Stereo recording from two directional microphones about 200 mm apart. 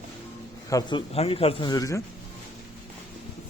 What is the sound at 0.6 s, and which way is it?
Speech, 15° left (ahead or behind).